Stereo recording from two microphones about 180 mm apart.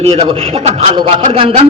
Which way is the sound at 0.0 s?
30° right (ahead or behind).